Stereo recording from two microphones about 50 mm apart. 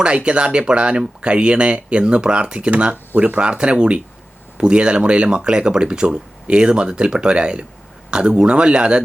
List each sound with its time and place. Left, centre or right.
0.0 s speech: right